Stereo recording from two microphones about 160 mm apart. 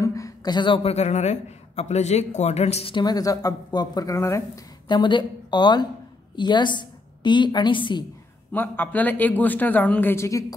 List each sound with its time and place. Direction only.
0.0 s a sound: 20° left (ahead or behind)
0.8 s a man's voice: 45° left (ahead or behind); by 8.0 s 30° left (ahead or behind)
8.5 s speech: 10° left (ahead or behind)